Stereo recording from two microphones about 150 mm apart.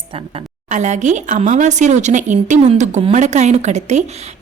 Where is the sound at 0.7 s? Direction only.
55° right (ahead or behind).